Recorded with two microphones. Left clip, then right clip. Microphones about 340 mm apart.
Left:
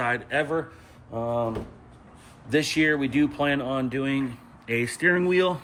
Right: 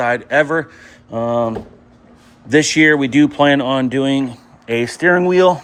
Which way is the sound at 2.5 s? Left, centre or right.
Centre.